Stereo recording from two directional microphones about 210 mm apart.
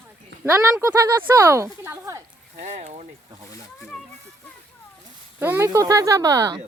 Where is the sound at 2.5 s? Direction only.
35° right (ahead or behind).